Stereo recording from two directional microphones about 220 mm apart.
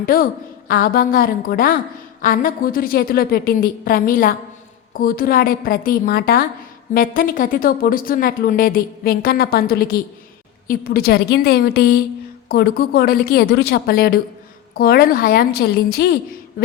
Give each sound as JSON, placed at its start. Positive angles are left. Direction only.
{"t": 0.0, "sound": "a woman's voice", "side_deg": 40}